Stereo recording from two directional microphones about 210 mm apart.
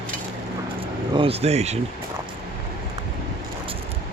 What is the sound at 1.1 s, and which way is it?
Speech, 25° right (ahead or behind).